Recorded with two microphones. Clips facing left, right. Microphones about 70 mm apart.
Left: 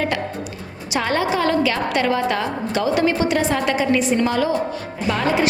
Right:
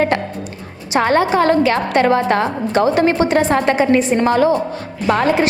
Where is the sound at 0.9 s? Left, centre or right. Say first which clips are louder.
Right 6 dB; right.